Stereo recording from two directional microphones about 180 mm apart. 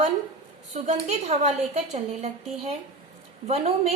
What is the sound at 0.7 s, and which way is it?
A woman's voice, 40° right (ahead or behind).